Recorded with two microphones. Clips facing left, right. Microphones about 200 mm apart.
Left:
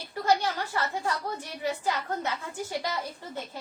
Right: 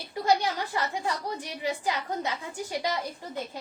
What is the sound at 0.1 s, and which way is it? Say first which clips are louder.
A woman's voice: right 1 dB; 15° right (ahead or behind).